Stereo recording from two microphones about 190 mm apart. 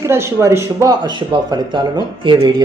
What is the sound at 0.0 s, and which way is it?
Speech, 15° right (ahead or behind).